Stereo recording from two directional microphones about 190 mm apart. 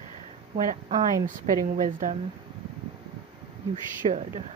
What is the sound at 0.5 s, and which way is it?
Speech, 40° right (ahead or behind).